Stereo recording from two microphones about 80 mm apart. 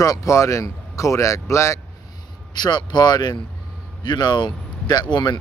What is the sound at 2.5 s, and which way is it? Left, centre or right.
Speech, left.